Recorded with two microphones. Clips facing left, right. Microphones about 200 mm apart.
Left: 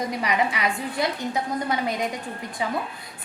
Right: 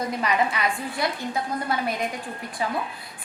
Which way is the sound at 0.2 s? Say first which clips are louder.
Right 1 dB; 20° left (ahead or behind).